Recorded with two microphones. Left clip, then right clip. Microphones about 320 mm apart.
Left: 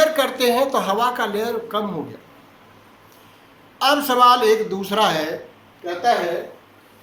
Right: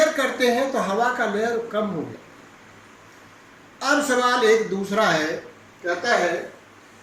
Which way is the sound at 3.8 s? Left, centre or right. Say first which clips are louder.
Left 5 dB; centre.